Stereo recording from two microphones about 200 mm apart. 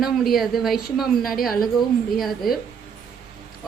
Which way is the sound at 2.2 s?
Centre (ahead or behind).